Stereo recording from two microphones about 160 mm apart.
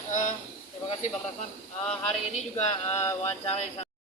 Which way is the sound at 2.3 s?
45° left (ahead or behind).